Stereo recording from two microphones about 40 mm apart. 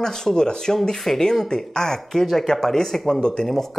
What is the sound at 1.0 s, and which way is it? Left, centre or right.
Speech, centre.